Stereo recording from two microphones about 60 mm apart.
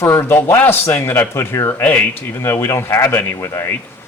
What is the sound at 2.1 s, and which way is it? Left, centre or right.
Speech, left.